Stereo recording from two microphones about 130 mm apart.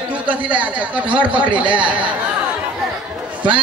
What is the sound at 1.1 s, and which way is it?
Speech, 40° right (ahead or behind).